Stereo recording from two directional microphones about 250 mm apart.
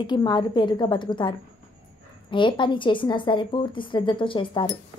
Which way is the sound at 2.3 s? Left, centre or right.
Centre.